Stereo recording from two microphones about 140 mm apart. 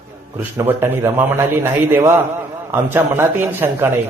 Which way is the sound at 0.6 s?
15° right (ahead or behind).